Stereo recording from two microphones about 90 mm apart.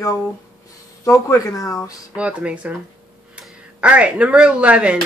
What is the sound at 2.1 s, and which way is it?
Speech, 15° right (ahead or behind).